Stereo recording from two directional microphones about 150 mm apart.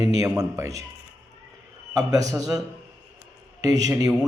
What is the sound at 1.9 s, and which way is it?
Speech, 25° right (ahead or behind).